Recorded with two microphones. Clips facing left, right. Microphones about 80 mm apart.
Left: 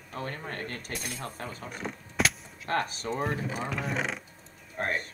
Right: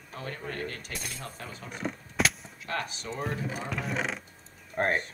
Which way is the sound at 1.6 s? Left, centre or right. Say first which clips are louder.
Right 2 dB; centre.